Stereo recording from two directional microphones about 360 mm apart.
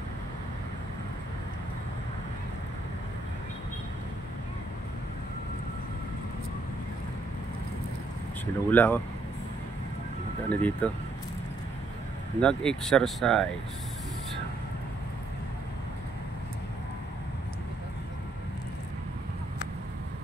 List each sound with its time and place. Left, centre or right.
8.6 s speech: centre
10.5 s speech: centre
12.4 s speech: centre